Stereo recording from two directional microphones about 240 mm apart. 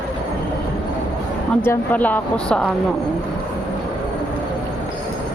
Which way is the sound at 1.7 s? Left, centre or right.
Centre.